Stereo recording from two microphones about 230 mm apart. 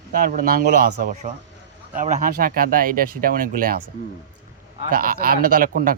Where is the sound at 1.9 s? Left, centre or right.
Right.